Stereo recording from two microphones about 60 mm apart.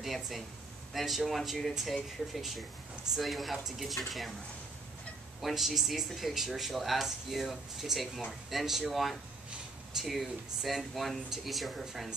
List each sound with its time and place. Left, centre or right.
0.0 s speech: centre
5.4 s speech: centre